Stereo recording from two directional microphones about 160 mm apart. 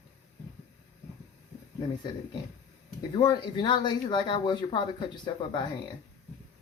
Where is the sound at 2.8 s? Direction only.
25° left (ahead or behind).